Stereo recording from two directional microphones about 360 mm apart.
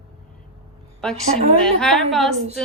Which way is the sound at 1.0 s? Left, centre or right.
Centre.